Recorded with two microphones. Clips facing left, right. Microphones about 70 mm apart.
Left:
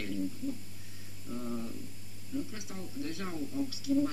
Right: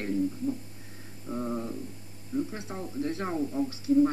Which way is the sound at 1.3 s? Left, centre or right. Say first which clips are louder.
Right 6 dB; right.